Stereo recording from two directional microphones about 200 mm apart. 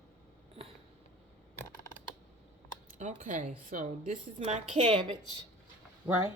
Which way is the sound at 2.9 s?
40° right (ahead or behind).